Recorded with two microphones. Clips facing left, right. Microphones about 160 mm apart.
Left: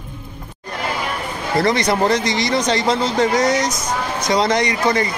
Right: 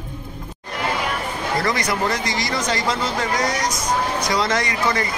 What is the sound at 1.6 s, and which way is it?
Speech, 25° left (ahead or behind).